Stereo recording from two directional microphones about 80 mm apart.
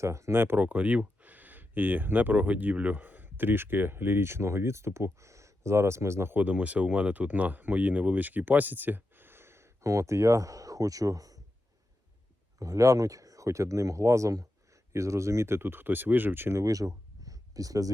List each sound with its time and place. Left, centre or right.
0.0 s speech: right
12.5 s speech: right
16.6 s speech: right